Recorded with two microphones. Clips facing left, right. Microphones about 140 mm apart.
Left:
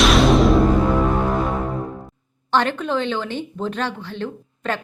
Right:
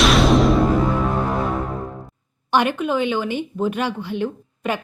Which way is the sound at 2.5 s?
10° right (ahead or behind).